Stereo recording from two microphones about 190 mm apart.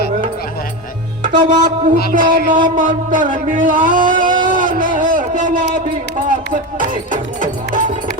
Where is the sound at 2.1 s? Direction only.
45° right (ahead or behind).